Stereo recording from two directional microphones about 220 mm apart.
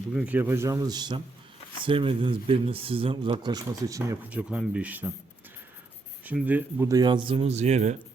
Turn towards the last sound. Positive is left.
turn(degrees=-30)  # may be behind; listen again after turning